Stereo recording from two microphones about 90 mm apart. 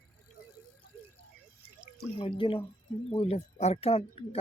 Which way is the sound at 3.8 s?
90° left.